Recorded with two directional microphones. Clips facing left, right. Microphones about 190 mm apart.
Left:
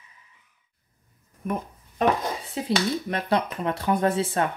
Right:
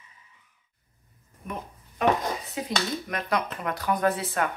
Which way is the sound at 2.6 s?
30° left (ahead or behind).